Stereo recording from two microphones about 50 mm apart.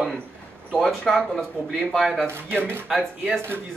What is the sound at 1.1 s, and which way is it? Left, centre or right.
Speech, centre.